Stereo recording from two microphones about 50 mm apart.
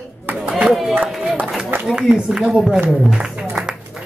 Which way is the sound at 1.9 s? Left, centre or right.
Centre.